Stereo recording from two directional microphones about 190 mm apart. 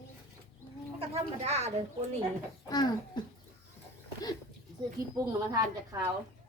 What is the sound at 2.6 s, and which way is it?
Speech, 20° left (ahead or behind).